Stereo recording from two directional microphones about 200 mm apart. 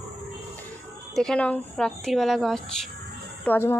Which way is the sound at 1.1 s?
5° left (ahead or behind).